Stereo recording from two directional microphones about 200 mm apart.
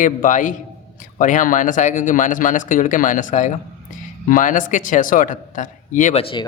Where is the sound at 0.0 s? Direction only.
40° left (ahead or behind).